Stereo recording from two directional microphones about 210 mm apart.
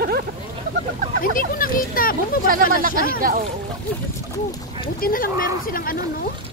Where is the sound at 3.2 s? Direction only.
40° right (ahead or behind).